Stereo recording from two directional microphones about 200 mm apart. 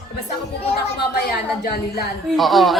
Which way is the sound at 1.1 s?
50° left (ahead or behind).